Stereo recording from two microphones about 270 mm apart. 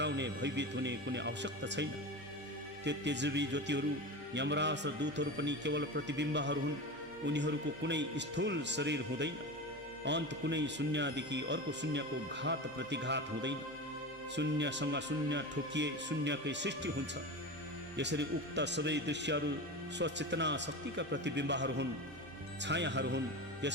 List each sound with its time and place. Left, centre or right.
0.0 s speech: right
17.9 s speech: right